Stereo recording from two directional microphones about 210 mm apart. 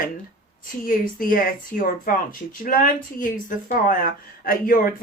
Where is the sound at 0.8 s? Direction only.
40° left (ahead or behind).